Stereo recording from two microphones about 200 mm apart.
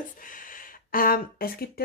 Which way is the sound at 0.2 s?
45° left (ahead or behind).